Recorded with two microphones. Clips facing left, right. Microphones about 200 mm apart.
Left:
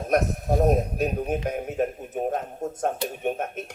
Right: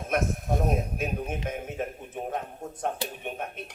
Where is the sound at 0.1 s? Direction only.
40° left (ahead or behind).